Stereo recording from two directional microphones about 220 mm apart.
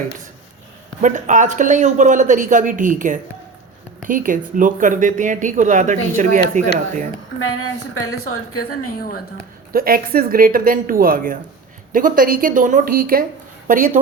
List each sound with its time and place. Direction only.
1.0 s speech: 35° right (ahead or behind)
7.5 s a woman's voice: 75° left (ahead or behind)
9.0 s a woman's voice: 40° left (ahead or behind)
9.7 s speech: 40° right (ahead or behind)